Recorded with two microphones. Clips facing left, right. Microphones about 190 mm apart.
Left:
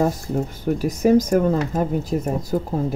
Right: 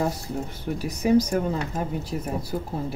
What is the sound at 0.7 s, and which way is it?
Speech, 45° left (ahead or behind).